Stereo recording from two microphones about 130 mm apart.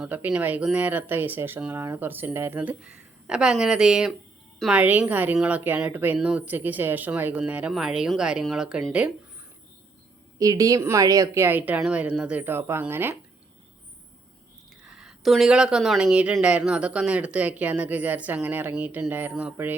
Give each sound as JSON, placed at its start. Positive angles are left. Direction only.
{"t": 0.0, "sound": "speech", "side_deg": -10}
{"t": 10.3, "sound": "speech", "side_deg": -25}
{"t": 14.8, "sound": "speech", "side_deg": -5}